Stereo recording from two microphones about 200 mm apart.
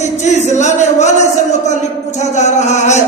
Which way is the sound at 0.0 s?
35° left (ahead or behind).